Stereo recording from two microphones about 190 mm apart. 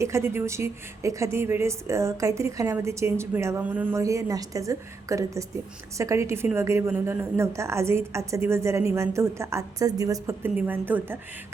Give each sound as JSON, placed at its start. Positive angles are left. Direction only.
{"t": 0.0, "sound": "a woman's voice", "side_deg": -15}